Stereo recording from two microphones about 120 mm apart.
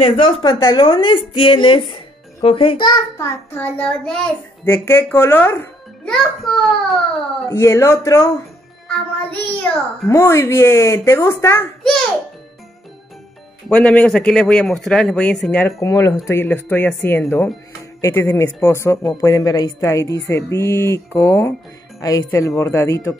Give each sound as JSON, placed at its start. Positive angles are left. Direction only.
{"t": 0.0, "sound": "a woman's voice", "side_deg": 40}
{"t": 3.2, "sound": "speech", "side_deg": 20}
{"t": 4.8, "sound": "speech", "side_deg": 20}
{"t": 6.0, "sound": "a child's voice", "side_deg": 5}
{"t": 7.4, "sound": "speech", "side_deg": 20}
{"t": 8.8, "sound": "speech", "side_deg": 15}
{"t": 11.8, "sound": "music", "side_deg": 5}
{"t": 13.7, "sound": "speech", "side_deg": 10}
{"t": 15.8, "sound": "speech", "side_deg": 30}
{"t": 16.3, "sound": "speech", "side_deg": 20}